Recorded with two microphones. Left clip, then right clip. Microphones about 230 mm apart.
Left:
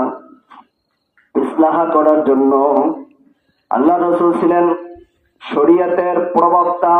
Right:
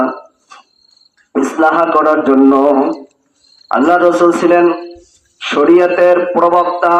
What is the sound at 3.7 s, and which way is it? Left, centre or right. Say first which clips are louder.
A man's voice: right 3 dB; left.